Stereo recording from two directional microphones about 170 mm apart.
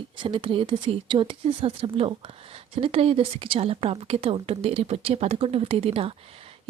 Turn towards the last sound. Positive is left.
turn(degrees=-35)  # may be behind; listen again after turning